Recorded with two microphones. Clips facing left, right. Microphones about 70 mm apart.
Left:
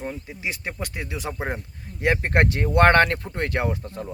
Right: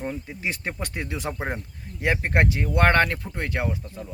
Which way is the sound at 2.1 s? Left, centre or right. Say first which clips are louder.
Even; centre.